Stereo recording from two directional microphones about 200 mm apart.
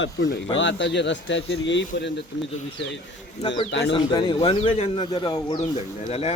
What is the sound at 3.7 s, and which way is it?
Speech, 65° left (ahead or behind).